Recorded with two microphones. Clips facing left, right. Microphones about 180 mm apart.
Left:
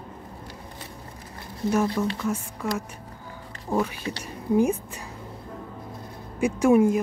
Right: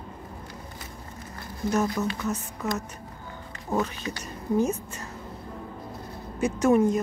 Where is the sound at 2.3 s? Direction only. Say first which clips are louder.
Left 1 dB; 10° left (ahead or behind).